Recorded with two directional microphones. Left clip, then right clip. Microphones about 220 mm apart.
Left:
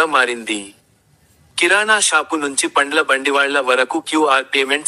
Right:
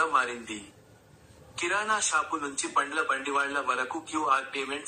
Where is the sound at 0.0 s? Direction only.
50° left (ahead or behind).